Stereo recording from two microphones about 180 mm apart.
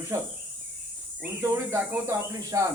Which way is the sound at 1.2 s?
10° right (ahead or behind).